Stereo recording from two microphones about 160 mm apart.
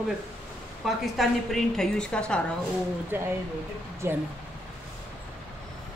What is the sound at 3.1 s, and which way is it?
Speech, 10° right (ahead or behind).